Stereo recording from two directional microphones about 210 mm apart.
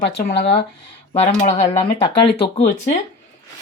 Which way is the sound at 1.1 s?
30° left (ahead or behind).